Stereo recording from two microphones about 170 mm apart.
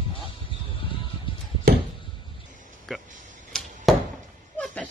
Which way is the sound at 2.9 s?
Centre (ahead or behind).